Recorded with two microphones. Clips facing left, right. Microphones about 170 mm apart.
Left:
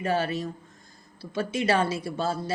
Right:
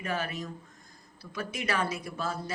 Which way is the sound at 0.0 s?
30° left (ahead or behind).